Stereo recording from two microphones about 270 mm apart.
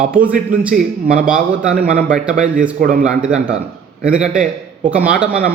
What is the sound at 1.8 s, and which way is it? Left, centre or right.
Speech, right.